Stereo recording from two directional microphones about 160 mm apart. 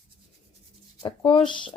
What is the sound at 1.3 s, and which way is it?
Speech, 35° left (ahead or behind).